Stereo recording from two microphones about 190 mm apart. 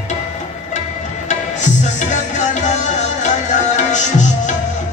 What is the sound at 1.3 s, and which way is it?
Music, 40° left (ahead or behind).